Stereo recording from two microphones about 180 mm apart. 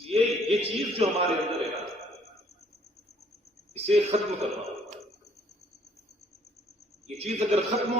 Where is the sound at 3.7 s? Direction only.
35° right (ahead or behind).